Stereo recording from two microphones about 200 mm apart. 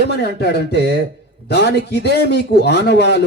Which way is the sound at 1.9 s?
55° left (ahead or behind).